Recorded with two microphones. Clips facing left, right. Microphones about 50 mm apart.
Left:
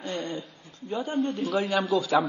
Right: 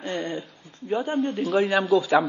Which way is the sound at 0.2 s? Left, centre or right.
Centre.